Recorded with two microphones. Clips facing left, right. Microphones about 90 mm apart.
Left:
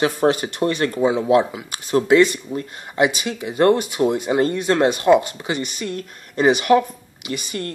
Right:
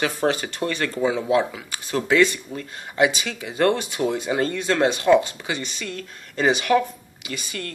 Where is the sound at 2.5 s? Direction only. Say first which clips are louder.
Left 6 dB; 20° left (ahead or behind).